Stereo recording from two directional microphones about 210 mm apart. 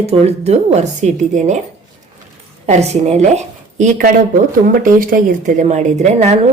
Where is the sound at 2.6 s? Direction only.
30° right (ahead or behind).